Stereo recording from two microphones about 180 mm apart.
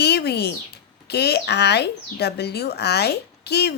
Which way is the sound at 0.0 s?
65° left (ahead or behind).